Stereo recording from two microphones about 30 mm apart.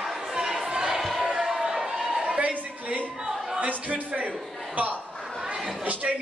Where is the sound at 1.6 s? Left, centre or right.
Centre.